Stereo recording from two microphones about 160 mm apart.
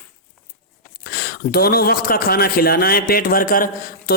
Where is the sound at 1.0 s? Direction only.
75° left (ahead or behind).